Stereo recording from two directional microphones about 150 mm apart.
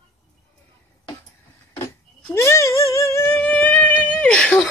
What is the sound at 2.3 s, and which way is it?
Music, 20° left (ahead or behind).